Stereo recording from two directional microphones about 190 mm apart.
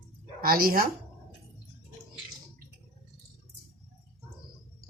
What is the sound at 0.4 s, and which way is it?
Speech, 50° right (ahead or behind).